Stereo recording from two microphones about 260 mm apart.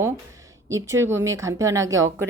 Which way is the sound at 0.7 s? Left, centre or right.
Centre.